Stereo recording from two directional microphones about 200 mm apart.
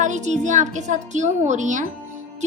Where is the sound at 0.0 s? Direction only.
35° right (ahead or behind).